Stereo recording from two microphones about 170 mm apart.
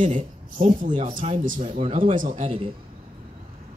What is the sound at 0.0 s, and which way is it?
Speech, 45° right (ahead or behind).